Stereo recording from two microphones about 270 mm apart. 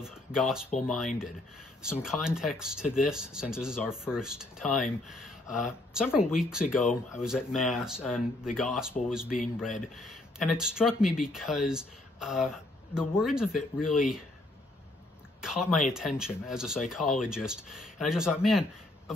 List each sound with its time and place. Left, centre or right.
0.0 s a sound: centre
0.8 s speech: centre
6.9 s speech: left
7.2 s speech: centre
15.4 s speech: centre